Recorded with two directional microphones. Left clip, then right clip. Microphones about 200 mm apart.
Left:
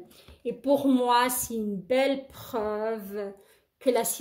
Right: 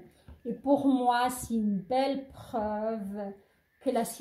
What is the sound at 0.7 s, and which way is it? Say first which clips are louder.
A woman's voice: left 2 dB; 35° left (ahead or behind).